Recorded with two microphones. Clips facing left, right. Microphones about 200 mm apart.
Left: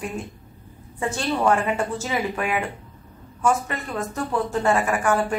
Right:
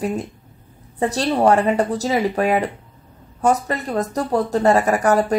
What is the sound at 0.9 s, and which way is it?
Speech, 35° right (ahead or behind).